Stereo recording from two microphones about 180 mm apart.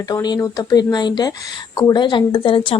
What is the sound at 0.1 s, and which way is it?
Speech, 20° left (ahead or behind).